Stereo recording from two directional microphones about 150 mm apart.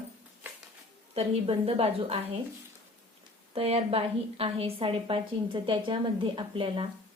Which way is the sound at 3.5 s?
40° right (ahead or behind).